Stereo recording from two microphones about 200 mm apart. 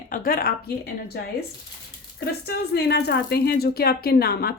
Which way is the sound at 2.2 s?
55° left (ahead or behind).